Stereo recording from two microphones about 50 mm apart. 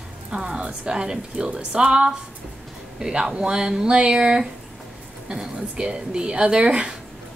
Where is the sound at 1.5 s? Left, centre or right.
Right.